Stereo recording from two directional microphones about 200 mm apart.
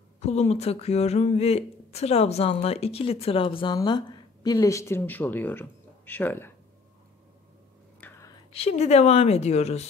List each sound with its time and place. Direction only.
0.2 s speech: 35° left (ahead or behind); by 6.5 s 10° left (ahead or behind)
8.5 s a woman's voice: 30° left (ahead or behind)